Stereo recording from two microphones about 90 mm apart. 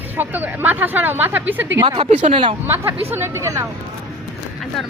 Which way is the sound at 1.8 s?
65° right (ahead or behind).